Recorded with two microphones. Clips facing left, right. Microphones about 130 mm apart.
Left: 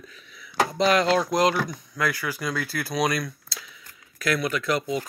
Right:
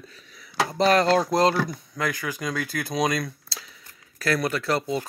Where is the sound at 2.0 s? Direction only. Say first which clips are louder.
Left 1 dB; 20° right (ahead or behind).